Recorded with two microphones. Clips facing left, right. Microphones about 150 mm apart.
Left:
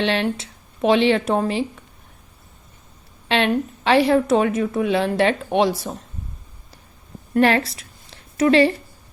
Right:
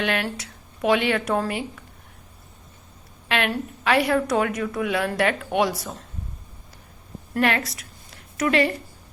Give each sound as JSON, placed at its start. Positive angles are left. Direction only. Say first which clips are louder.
{"t": 0.0, "sound": "a woman's voice", "louder": "left 4 dB", "side_deg": 25}
{"t": 3.2, "sound": "a woman's voice", "louder": "left 5 dB", "side_deg": 30}
{"t": 7.3, "sound": "a woman's voice", "louder": "left 6 dB", "side_deg": 30}